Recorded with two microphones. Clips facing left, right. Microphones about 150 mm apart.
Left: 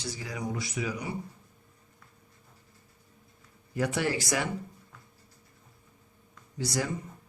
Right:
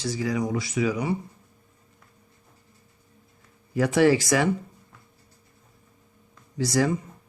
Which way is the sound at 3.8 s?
90° right.